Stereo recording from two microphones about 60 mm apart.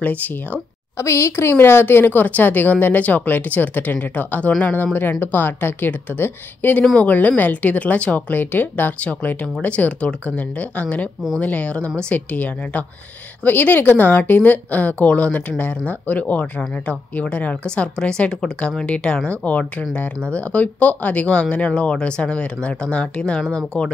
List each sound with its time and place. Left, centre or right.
0.0 s a woman's voice: left
0.9 s a woman's voice: left; by 23.9 s centre